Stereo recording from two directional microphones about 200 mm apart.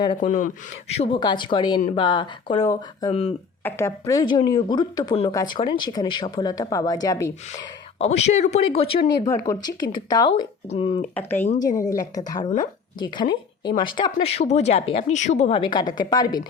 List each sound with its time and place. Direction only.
0.2 s speech: 40° left (ahead or behind)
0.9 s speech: 25° left (ahead or behind)
3.1 s speech: 30° left (ahead or behind)
3.6 s speech: 10° left (ahead or behind)
7.9 s speech: 30° left (ahead or behind)
9.2 s speech: 15° left (ahead or behind)
11.1 s a woman's voice: 10° left (ahead or behind)